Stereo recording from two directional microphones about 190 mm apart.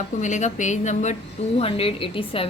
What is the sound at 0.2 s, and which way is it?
A woman's voice, 40° left (ahead or behind).